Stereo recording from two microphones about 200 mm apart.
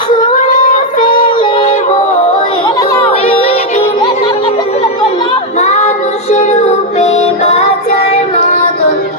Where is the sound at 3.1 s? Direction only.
30° left (ahead or behind).